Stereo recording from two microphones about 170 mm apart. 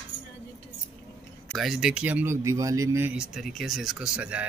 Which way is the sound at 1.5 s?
Centre (ahead or behind).